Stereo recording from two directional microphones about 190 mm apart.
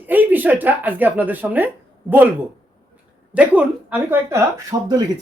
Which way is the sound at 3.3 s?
5° right (ahead or behind).